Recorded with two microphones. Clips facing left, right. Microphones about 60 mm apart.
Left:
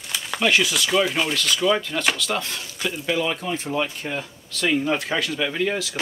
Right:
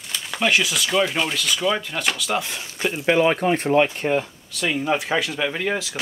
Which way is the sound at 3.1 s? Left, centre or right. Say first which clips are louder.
Right 8 dB; right.